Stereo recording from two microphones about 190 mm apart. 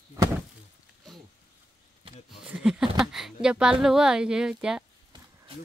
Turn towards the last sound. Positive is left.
turn(degrees=-5)  # may be behind; listen again after turning